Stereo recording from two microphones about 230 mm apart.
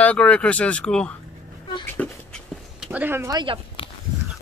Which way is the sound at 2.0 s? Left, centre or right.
Centre.